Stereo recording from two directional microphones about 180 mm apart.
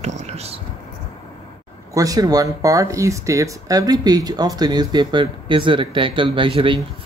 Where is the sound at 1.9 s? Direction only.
20° right (ahead or behind).